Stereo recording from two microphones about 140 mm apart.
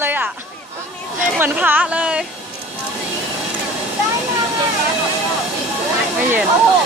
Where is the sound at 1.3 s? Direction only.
15° right (ahead or behind).